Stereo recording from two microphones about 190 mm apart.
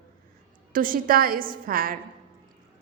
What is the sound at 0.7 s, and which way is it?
A woman's voice, 50° right (ahead or behind).